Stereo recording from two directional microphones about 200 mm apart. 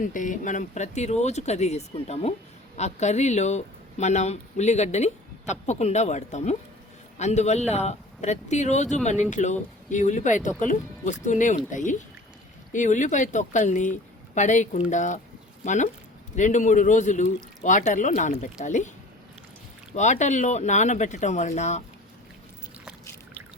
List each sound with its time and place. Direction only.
0.0 s speech: 40° left (ahead or behind)
20.0 s speech: 35° left (ahead or behind)